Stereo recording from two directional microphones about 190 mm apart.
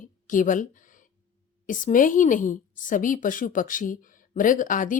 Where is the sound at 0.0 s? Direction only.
45° left (ahead or behind).